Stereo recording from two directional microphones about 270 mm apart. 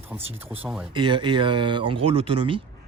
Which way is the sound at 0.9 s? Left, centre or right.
Centre.